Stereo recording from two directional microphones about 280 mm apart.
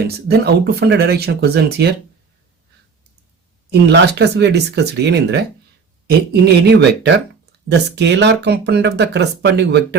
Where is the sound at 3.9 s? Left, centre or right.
Right.